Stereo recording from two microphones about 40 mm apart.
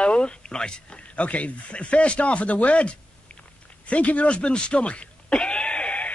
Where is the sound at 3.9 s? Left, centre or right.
Left.